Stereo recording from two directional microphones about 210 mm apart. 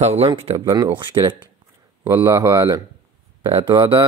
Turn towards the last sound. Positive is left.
turn(degrees=-20)  # may be behind; listen again after turning